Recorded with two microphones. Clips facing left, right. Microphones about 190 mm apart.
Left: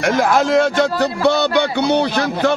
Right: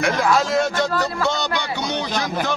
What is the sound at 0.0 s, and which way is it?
Speech, 50° left (ahead or behind).